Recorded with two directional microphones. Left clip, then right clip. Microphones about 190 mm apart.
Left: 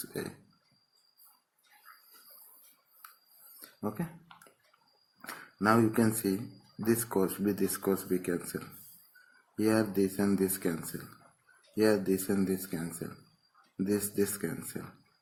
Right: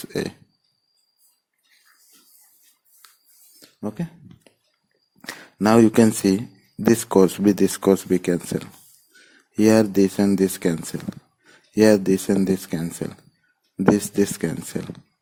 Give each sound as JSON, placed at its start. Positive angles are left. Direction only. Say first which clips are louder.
{"t": 0.1, "sound": "speech", "louder": "right 13 dB", "side_deg": -50}
{"t": 3.8, "sound": "speech", "louder": "right 6 dB", "side_deg": -40}
{"t": 5.2, "sound": "speech", "louder": "right 8 dB", "side_deg": -55}
{"t": 11.8, "sound": "speech", "louder": "right 11 dB", "side_deg": -55}